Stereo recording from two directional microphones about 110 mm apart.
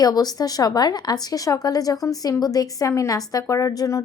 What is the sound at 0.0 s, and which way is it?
A woman's voice, 35° left (ahead or behind).